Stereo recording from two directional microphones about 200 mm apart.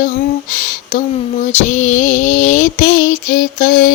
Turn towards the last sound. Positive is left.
turn(degrees=45)  # may be behind; listen again after turning